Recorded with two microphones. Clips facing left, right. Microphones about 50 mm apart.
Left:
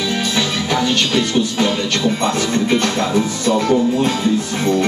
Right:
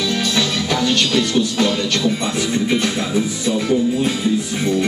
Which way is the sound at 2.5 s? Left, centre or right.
Left.